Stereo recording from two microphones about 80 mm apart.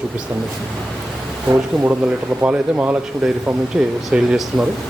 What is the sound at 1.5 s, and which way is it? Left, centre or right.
Speech, right.